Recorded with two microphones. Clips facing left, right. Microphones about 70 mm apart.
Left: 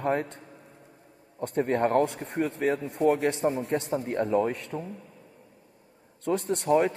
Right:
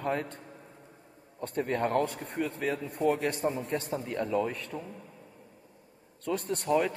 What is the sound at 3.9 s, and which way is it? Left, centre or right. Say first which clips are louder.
Speech: left 5 dB; left.